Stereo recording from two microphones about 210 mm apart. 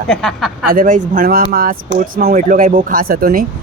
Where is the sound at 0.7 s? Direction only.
40° right (ahead or behind).